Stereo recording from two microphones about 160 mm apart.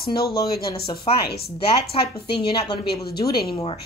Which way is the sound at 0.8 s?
35° left (ahead or behind).